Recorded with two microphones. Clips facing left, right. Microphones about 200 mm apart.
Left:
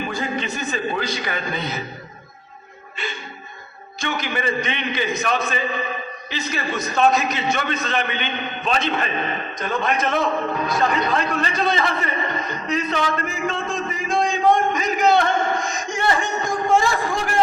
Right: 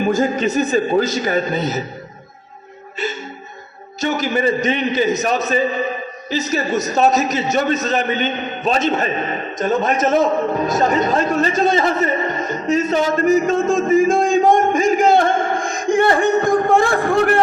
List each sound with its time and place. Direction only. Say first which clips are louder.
0.0 s a man's voice: right 9 dB; 45° right (ahead or behind)
4.0 s a man's voice: right 7 dB; 40° right (ahead or behind); by 17.4 s 60° right (ahead or behind)